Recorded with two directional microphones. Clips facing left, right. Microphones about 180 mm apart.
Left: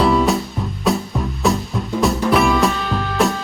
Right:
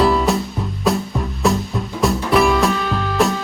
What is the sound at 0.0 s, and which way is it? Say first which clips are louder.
Music: even; centre (ahead or behind).